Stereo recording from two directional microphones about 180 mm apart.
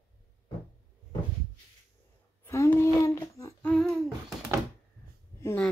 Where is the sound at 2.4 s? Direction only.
15° left (ahead or behind).